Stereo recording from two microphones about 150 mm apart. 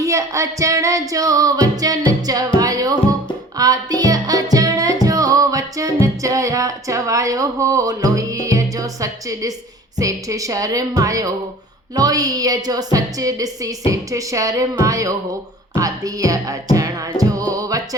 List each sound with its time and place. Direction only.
0.0 s music: 20° right (ahead or behind)
10.0 s a woman's voice: 20° right (ahead or behind)
17.2 s music: 25° right (ahead or behind)